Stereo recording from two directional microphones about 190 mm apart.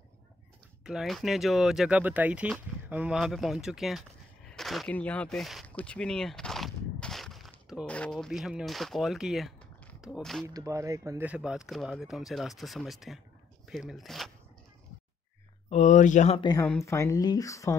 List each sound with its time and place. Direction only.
0.8 s speech: centre (ahead or behind)
10.4 s speech: 15° right (ahead or behind); by 14.3 s centre (ahead or behind)
15.7 s speech: 40° left (ahead or behind)
16.8 s speech: 15° left (ahead or behind)